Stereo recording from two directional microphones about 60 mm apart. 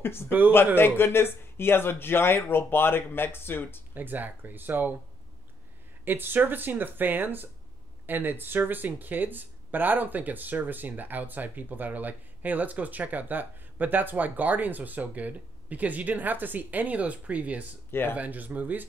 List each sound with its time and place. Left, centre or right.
0.0 s speech: left
3.9 s speech: right
6.0 s speech: right